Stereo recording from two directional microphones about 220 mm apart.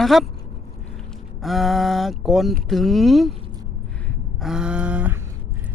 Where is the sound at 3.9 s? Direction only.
5° left (ahead or behind).